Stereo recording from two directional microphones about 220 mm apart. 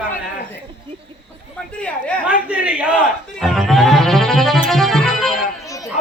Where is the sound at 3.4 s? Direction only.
Centre (ahead or behind).